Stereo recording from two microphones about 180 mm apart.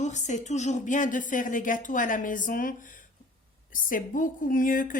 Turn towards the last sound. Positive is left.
turn(degrees=50)  # may be behind; listen again after turning